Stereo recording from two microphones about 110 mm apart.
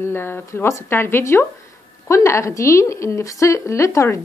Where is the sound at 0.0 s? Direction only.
20° left (ahead or behind).